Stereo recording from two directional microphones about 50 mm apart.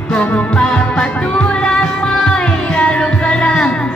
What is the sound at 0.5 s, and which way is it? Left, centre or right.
Music, centre.